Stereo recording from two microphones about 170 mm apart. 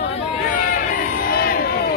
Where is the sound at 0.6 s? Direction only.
60° left (ahead or behind).